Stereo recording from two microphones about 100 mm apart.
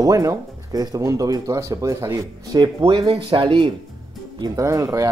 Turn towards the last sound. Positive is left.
turn(degrees=-35)  # may be behind; listen again after turning